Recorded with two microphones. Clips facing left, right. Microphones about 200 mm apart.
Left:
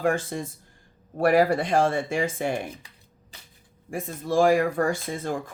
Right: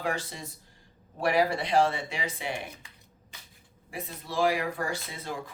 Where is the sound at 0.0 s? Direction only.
50° left (ahead or behind).